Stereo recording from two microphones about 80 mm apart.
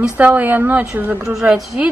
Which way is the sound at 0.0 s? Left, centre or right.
Centre.